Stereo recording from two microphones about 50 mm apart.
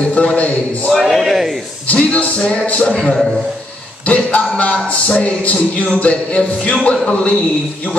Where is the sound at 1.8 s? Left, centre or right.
Left.